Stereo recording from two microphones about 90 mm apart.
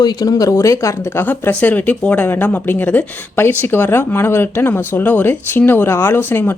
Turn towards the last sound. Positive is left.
turn(degrees=20)  # may be behind; listen again after turning